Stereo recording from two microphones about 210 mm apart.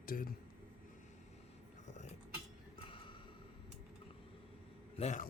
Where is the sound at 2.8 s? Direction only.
25° left (ahead or behind).